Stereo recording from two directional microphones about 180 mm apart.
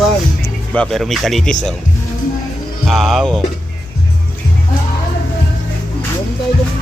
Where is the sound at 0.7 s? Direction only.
5° left (ahead or behind).